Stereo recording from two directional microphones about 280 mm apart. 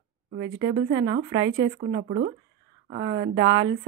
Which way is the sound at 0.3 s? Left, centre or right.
Right.